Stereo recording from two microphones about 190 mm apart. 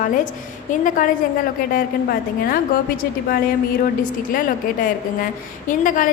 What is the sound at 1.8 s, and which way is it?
Speech, 50° left (ahead or behind).